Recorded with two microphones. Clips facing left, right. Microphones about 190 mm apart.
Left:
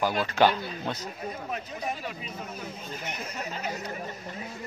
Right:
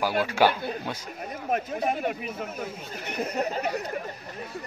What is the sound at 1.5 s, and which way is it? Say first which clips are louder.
Speech: right 11 dB; 55° right (ahead or behind).